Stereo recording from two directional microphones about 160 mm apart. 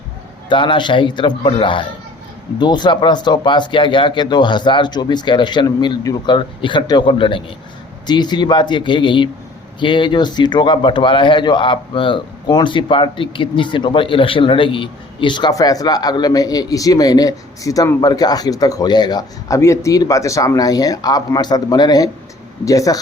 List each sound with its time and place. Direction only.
0.4 s a man's voice: 30° left (ahead or behind)